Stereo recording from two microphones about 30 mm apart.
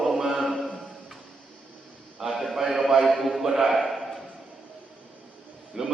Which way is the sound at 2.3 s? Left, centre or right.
Centre.